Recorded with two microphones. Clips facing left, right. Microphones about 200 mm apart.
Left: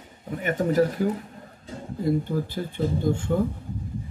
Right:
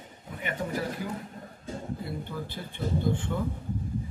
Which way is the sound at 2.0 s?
45° left (ahead or behind).